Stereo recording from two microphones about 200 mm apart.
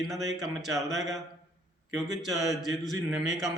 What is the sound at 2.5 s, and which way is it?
A man's voice, centre (ahead or behind).